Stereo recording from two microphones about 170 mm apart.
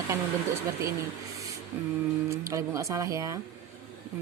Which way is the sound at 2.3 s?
15° right (ahead or behind).